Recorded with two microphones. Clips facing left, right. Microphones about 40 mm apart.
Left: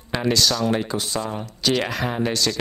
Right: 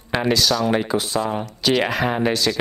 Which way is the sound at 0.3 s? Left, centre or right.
Centre.